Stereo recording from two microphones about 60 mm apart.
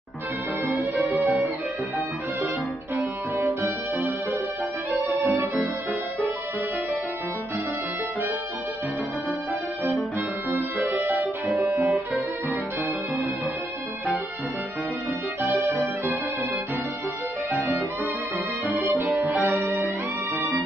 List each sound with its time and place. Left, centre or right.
1.1 s music: right
3.0 s music: right
10.5 s music: right
11.6 s music: right
15.4 s music: right
18.9 s music: right
19.2 s music: right